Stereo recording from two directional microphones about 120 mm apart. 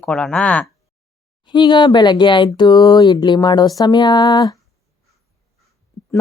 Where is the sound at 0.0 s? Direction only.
10° left (ahead or behind).